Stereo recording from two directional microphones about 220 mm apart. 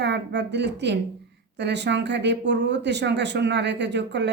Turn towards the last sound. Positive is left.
turn(degrees=-50)  # may be behind; listen again after turning